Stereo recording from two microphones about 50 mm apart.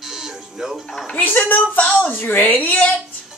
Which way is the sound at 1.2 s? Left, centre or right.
Left.